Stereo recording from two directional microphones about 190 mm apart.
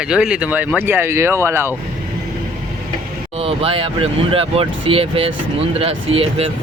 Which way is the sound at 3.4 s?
30° right (ahead or behind).